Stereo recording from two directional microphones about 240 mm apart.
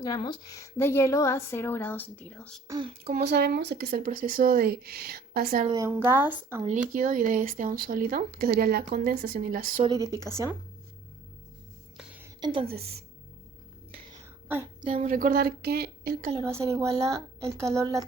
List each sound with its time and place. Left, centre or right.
0.0 s a woman's voice: centre
2.6 s speech: centre
3.1 s speech: right
5.7 s a woman's voice: centre
6.9 s speech: right
9.8 s a woman's voice: centre
12.4 s a woman's voice: centre
12.6 s speech: right
14.8 s speech: right
16.3 s a woman's voice: centre